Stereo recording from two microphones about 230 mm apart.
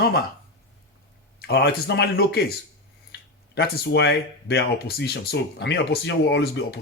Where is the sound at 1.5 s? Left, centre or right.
Left.